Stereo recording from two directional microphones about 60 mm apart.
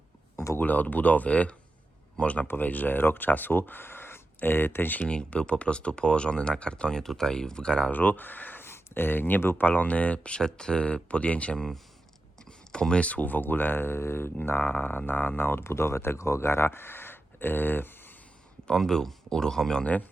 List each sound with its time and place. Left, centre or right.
0.3 s a sound: left
0.6 s speech: left
4.9 s speech: centre
7.9 s speech: left
11.5 s speech: centre
12.5 s speech: centre; by 14.3 s left
14.3 s speech: left
18.7 s speech: centre
19.8 s speech: left